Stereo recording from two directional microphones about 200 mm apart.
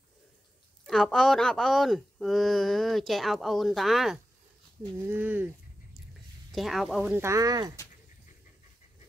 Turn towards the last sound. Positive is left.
turn(degrees=-20)  # may be behind; listen again after turning